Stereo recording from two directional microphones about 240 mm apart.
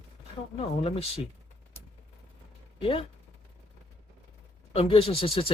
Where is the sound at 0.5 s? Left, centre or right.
Left.